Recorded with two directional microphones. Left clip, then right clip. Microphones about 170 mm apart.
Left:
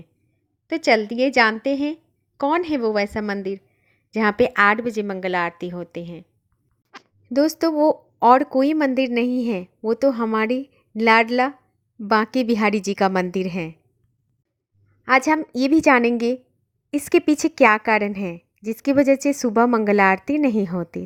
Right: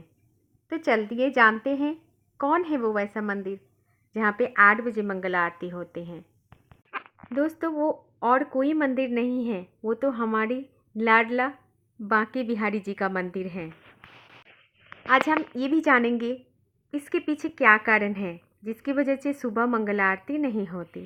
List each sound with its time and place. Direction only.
0.7 s a woman's voice: 25° left (ahead or behind)
4.1 s a woman's voice: 45° left (ahead or behind)
7.7 s a woman's voice: 45° left (ahead or behind)
15.0 s a woman's voice: 40° left (ahead or behind)